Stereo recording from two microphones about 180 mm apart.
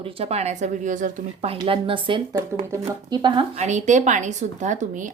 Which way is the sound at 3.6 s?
40° right (ahead or behind).